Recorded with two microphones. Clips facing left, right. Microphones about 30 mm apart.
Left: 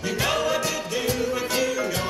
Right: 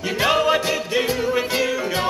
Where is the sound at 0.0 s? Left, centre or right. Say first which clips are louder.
Right 5 dB; right.